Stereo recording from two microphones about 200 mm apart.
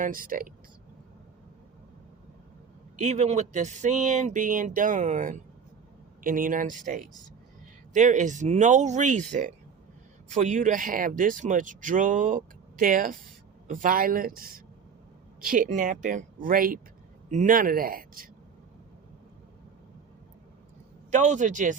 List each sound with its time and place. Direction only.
0.0 s speech: 45° right (ahead or behind)
3.0 s speech: 35° right (ahead or behind)
21.1 s speech: 35° right (ahead or behind)